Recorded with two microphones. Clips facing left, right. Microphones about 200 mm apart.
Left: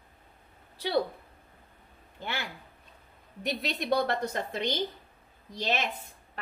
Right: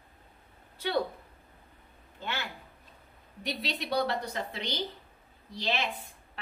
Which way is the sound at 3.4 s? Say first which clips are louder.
Left 3 dB; 50° left (ahead or behind).